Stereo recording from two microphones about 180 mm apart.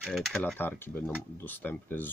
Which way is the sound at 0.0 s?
Centre (ahead or behind).